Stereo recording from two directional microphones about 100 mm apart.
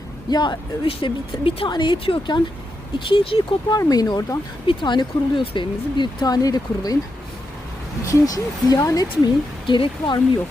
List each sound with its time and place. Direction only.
0.3 s speech: 45° left (ahead or behind)
3.1 s speech: 65° left (ahead or behind)
3.7 s speech: 40° left (ahead or behind)
4.6 s speech: 55° left (ahead or behind); by 6.9 s 40° left (ahead or behind)
8.0 s speech: 35° left (ahead or behind); by 10.2 s 55° left (ahead or behind)